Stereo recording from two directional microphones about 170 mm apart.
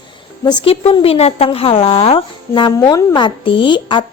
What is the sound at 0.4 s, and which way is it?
A woman's voice, 30° left (ahead or behind).